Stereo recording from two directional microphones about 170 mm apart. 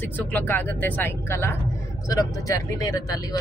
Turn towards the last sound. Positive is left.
turn(degrees=20)  # may be behind; listen again after turning